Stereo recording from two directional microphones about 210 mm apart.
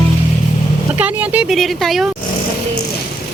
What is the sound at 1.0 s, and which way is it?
Speech, 5° right (ahead or behind).